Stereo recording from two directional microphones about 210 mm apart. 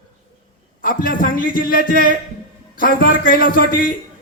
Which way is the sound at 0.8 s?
45° left (ahead or behind).